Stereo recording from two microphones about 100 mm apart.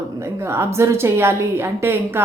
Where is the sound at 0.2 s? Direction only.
25° right (ahead or behind).